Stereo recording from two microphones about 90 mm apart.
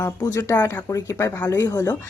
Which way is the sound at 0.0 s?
40° left (ahead or behind).